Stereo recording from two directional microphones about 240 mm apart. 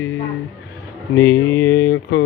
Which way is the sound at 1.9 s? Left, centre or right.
Left.